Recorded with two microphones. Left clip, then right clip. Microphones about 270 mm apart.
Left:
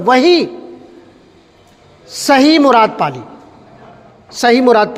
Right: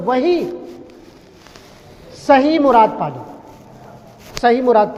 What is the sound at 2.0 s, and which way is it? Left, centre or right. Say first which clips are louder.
A man's voice: left 3 dB; left.